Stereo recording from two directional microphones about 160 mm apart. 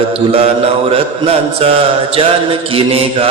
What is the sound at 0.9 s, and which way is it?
Mantra, 35° right (ahead or behind).